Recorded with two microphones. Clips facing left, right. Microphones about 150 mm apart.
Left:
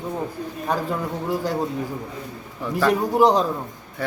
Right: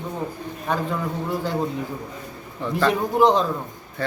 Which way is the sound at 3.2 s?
35° left (ahead or behind).